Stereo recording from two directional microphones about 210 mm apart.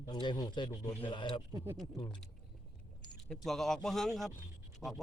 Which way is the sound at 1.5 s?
10° right (ahead or behind).